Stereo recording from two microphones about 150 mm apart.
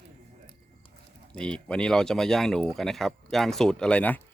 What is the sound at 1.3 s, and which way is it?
Speech, 5° left (ahead or behind).